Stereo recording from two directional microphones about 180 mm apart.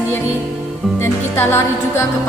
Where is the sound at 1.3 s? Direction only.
15° left (ahead or behind).